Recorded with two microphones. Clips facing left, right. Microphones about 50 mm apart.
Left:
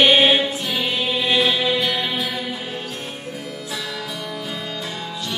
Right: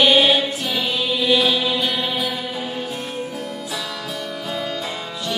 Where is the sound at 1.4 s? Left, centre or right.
Centre.